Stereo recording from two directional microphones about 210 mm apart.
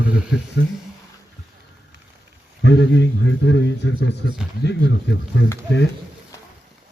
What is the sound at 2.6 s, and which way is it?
A man's voice, 55° left (ahead or behind).